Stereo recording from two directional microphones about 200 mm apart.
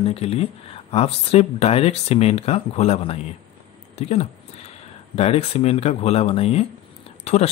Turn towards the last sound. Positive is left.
turn(degrees=30)  # may be behind; listen again after turning